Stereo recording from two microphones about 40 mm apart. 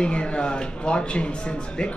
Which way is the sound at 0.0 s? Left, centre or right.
Left.